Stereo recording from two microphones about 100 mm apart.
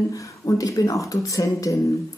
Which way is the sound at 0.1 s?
35° left (ahead or behind).